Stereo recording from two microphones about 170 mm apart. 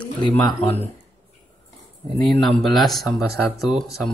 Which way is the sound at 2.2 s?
Centre (ahead or behind).